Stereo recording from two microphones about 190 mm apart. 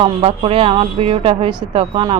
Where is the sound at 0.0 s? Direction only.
30° right (ahead or behind).